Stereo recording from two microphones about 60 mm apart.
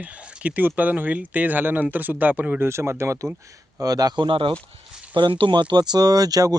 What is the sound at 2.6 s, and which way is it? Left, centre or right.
Speech, right.